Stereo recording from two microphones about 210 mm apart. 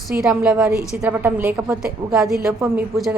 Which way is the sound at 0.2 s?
5° right (ahead or behind).